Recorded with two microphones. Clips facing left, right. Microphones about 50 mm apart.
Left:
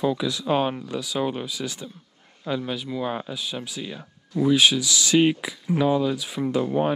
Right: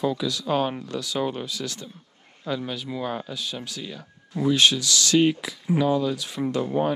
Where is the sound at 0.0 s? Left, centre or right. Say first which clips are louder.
Left 1 dB; centre.